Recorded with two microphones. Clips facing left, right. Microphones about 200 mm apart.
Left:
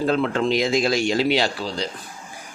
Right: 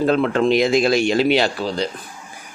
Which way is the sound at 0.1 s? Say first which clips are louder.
Right 4 dB; 60° right (ahead or behind).